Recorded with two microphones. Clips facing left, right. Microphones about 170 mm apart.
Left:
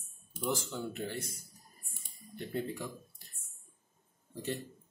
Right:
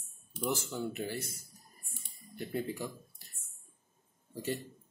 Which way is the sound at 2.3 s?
5° right (ahead or behind).